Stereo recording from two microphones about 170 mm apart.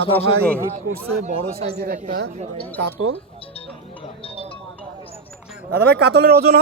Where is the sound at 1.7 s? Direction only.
70° right (ahead or behind).